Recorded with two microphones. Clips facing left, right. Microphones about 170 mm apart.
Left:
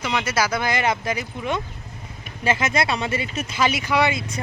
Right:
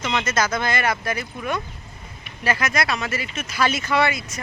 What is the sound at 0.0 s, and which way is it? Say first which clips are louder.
Speech: even; 10° left (ahead or behind).